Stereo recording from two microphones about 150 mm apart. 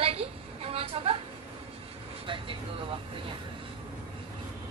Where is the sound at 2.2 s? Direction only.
35° right (ahead or behind).